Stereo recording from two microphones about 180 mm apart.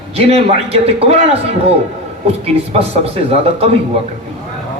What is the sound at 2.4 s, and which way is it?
A man's voice, 35° right (ahead or behind).